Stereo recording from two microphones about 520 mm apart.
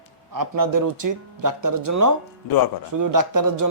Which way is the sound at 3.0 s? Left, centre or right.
Right.